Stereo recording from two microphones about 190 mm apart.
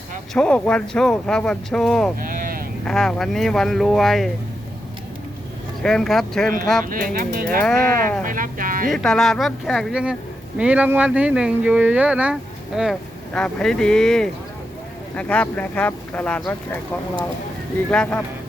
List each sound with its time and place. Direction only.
0.3 s speech: 5° left (ahead or behind)
2.2 s sheep: 45° right (ahead or behind)
2.8 s speech: 5° left (ahead or behind)
5.8 s speech: centre (ahead or behind)
6.9 s speech: 50° right (ahead or behind)
7.6 s speech: centre (ahead or behind)
8.2 s music: 45° right (ahead or behind)
8.9 s speech: centre (ahead or behind)
17.9 s speech: 5° left (ahead or behind)